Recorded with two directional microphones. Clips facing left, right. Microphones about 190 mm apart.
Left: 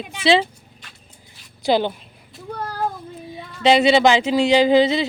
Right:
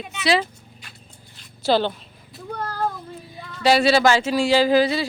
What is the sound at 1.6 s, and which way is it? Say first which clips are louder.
Speech: left 1 dB; 15° left (ahead or behind).